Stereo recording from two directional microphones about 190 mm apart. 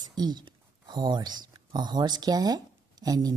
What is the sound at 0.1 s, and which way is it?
Speech, 20° right (ahead or behind).